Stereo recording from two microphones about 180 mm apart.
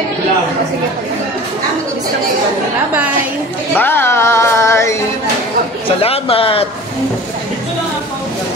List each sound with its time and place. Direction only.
3.7 s speech: 10° left (ahead or behind)
5.9 s speech: 30° left (ahead or behind)